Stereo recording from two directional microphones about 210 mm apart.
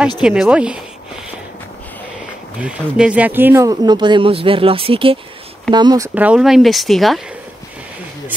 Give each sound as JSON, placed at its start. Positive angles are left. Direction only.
{"t": 0.2, "sound": "speech", "side_deg": -5}
{"t": 2.6, "sound": "speech", "side_deg": -5}
{"t": 6.1, "sound": "speech", "side_deg": -5}